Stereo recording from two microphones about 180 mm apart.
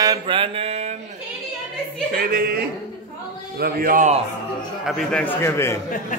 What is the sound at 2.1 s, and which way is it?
A man's voice, 55° right (ahead or behind).